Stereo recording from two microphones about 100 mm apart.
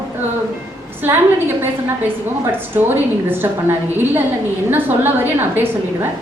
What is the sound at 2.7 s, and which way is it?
A woman's voice, 20° right (ahead or behind).